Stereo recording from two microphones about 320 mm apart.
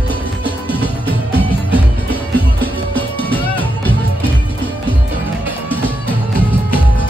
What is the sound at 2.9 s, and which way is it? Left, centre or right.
Music, centre.